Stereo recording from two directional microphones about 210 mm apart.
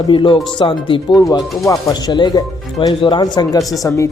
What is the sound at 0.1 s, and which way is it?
Speech, 25° left (ahead or behind).